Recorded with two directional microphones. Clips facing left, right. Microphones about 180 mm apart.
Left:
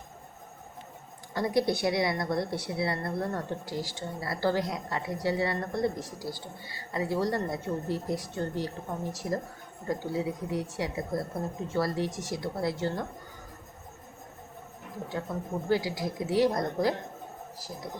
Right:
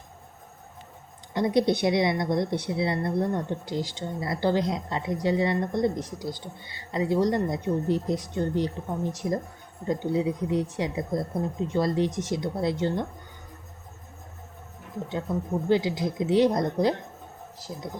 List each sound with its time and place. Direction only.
1.3 s a woman's voice: 20° right (ahead or behind)
15.7 s a woman's voice: 20° right (ahead or behind)